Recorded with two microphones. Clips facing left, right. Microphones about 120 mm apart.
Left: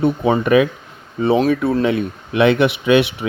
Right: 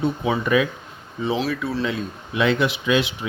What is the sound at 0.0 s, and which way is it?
Speech, 55° left (ahead or behind).